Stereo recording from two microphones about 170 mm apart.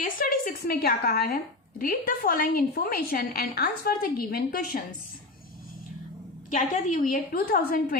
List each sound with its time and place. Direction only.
0.0 s a woman's voice: 55° left (ahead or behind)
6.5 s a woman's voice: 50° left (ahead or behind)